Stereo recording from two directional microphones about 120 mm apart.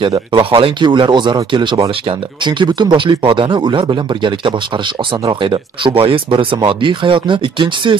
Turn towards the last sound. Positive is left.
turn(degrees=-40)  # may be behind; listen again after turning